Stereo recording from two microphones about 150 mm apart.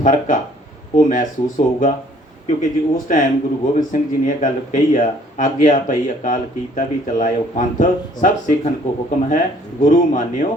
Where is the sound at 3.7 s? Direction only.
60° left (ahead or behind).